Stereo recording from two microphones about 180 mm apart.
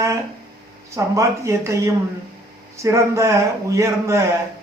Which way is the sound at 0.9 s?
15° right (ahead or behind).